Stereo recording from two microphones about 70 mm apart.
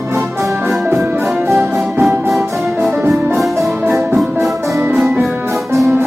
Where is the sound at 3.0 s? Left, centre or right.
Right.